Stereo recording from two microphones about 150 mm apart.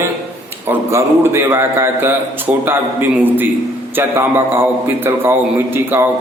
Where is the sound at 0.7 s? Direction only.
15° right (ahead or behind).